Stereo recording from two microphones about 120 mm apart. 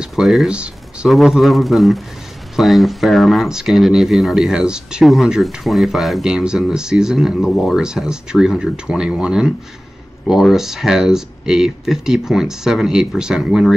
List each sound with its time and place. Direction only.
0.0 s speech: centre (ahead or behind)